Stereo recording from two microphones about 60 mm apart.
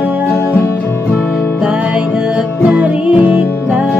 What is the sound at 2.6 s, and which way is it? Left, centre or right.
Music, right.